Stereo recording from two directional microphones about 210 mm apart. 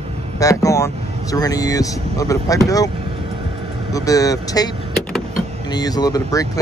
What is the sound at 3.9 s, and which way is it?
Speech, 15° left (ahead or behind).